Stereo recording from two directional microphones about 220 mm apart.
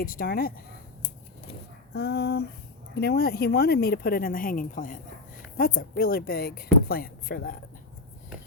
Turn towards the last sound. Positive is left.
turn(degrees=40)  # may be behind; listen again after turning